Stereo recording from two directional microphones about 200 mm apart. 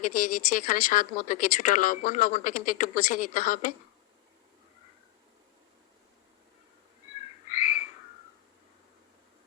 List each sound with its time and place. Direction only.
0.0 s speech: 40° left (ahead or behind)
7.5 s frog: 40° left (ahead or behind)